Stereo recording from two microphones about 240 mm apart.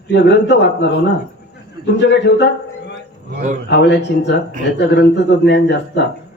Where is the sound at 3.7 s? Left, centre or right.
Left.